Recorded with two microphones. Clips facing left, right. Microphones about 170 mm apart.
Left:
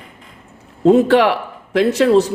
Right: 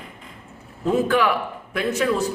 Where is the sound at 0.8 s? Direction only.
70° left (ahead or behind).